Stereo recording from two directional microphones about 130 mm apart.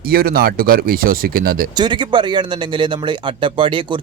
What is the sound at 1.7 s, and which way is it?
Speech, 35° right (ahead or behind).